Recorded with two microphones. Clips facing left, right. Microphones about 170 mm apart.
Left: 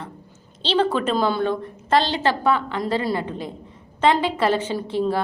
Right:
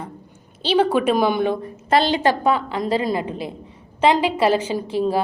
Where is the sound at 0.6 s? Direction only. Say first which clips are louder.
Right 3 dB; 10° right (ahead or behind).